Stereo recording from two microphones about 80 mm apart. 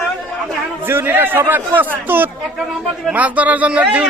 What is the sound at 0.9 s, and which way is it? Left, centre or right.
Speech, right.